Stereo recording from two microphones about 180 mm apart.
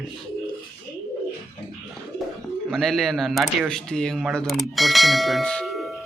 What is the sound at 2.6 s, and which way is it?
Speech, centre (ahead or behind).